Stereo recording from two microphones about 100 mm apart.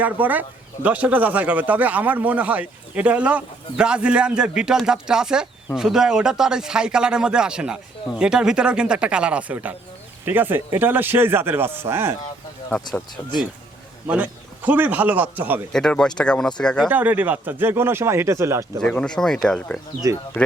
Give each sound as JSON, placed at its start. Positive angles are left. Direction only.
{"t": 0.0, "sound": "speech", "side_deg": -15}
{"t": 14.1, "sound": "speech", "side_deg": -15}
{"t": 15.7, "sound": "speech", "side_deg": 5}
{"t": 16.9, "sound": "speech", "side_deg": -15}
{"t": 18.8, "sound": "speech", "side_deg": 10}
{"t": 20.0, "sound": "speech", "side_deg": -40}